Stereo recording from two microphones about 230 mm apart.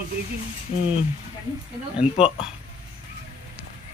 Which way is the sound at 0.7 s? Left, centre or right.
Left.